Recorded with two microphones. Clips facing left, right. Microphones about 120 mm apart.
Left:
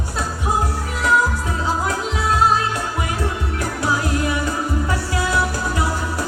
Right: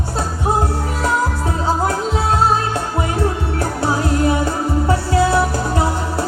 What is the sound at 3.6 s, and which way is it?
Music, 35° right (ahead or behind).